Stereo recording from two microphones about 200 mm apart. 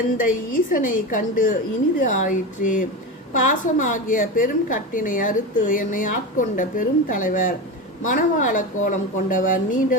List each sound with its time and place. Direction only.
0.2 s a woman's voice: 45° left (ahead or behind)